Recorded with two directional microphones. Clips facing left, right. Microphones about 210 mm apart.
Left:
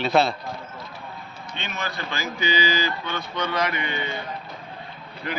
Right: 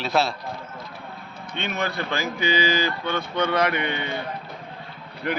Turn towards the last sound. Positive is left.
turn(degrees=-55)  # may be behind; listen again after turning